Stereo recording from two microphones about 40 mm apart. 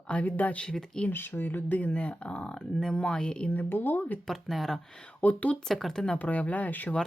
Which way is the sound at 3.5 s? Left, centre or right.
Left.